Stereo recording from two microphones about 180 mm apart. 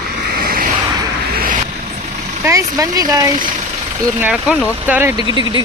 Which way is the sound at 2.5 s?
20° right (ahead or behind).